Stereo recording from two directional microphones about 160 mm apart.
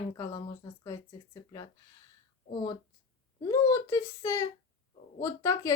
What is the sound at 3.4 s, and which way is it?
A woman's voice, 20° left (ahead or behind).